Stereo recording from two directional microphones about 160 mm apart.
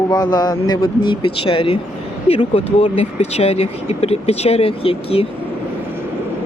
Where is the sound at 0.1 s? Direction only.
25° left (ahead or behind).